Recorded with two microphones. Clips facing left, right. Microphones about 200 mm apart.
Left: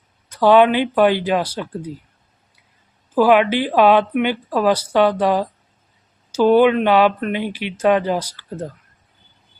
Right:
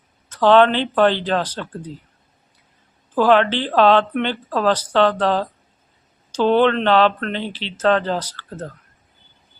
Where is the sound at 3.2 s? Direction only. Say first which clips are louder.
Left 2 dB; 10° left (ahead or behind).